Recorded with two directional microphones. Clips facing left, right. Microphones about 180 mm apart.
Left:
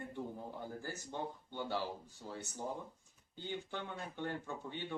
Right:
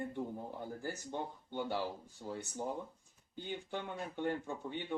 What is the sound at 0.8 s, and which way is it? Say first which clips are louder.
Speech: right 3 dB; 15° right (ahead or behind).